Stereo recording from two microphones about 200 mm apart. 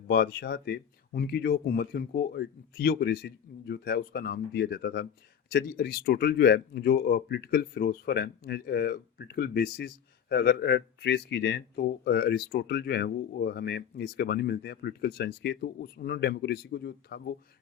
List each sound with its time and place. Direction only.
0.1 s speech: 55° left (ahead or behind)